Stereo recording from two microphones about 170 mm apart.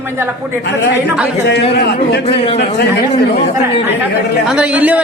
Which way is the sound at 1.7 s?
75° left (ahead or behind).